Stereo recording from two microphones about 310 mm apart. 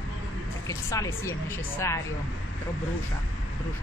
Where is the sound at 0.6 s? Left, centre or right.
Centre.